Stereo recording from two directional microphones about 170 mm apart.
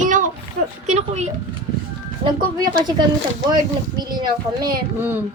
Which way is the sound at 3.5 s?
25° right (ahead or behind).